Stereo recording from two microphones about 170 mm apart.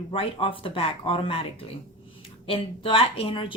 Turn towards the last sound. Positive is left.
turn(degrees=30)  # may be behind; listen again after turning